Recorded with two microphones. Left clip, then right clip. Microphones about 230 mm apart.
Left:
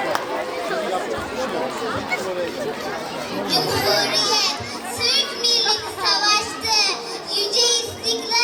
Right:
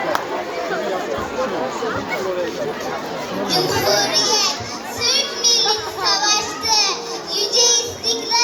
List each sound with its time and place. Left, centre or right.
3.5 s a sound: centre
5.0 s children playing: centre
7.3 s music: centre